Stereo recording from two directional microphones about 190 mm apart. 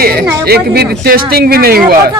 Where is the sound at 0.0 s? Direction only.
55° right (ahead or behind).